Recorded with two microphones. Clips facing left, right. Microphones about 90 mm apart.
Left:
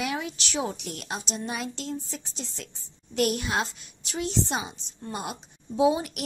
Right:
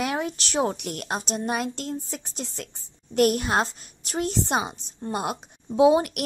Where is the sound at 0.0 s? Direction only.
45° right (ahead or behind).